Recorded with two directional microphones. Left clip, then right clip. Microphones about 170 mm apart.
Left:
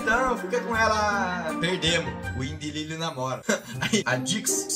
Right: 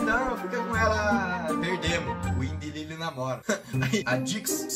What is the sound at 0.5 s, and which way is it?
Speech, centre (ahead or behind).